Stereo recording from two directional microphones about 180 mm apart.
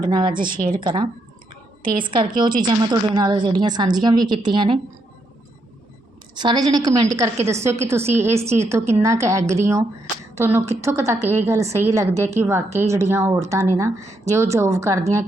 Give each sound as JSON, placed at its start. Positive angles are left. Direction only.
{"t": 0.0, "sound": "a woman's voice", "side_deg": -25}
{"t": 0.3, "sound": "a woman's voice", "side_deg": -50}
{"t": 0.8, "sound": "a woman's voice", "side_deg": -25}
{"t": 1.8, "sound": "a woman's voice", "side_deg": -50}
{"t": 2.0, "sound": "a woman's voice", "side_deg": -25}
{"t": 6.4, "sound": "a woman's voice", "side_deg": -25}